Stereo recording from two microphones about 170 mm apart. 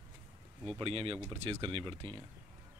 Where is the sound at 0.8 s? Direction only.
35° right (ahead or behind).